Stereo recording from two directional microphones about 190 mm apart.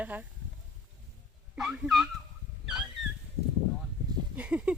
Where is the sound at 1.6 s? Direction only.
5° right (ahead or behind).